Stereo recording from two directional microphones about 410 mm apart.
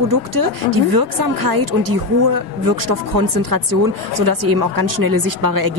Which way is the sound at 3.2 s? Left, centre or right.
Right.